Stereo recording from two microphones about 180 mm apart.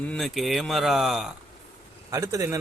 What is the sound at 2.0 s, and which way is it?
Speech, 20° right (ahead or behind).